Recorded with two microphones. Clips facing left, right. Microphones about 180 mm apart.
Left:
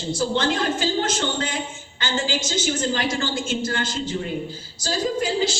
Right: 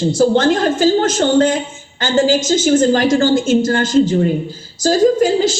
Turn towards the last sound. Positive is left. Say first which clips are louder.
# right 10 dB
turn(degrees=-45)  # may be behind; listen again after turning